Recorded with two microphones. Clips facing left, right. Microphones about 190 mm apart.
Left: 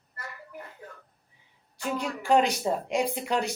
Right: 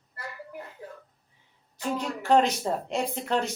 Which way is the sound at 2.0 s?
10° left (ahead or behind).